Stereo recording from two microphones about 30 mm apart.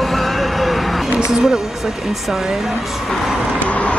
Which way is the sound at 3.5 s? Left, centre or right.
Left.